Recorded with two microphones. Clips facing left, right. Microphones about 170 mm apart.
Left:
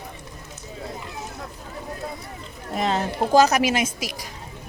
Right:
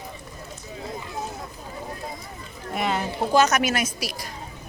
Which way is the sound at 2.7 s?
35° left (ahead or behind).